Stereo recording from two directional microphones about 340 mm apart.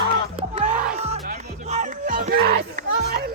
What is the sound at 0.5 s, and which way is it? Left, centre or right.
Music, centre.